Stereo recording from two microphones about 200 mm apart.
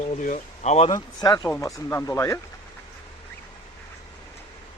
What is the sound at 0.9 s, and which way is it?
Speech, 20° left (ahead or behind).